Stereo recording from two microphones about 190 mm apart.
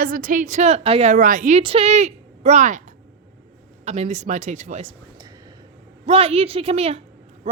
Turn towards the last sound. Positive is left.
turn(degrees=-30)  # may be behind; listen again after turning